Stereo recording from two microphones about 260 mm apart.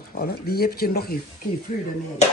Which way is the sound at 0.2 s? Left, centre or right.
Left.